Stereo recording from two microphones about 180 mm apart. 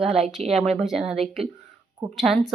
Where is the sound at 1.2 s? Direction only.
35° right (ahead or behind).